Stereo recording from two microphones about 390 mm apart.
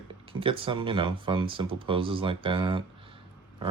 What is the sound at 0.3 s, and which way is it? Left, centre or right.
Speech, centre.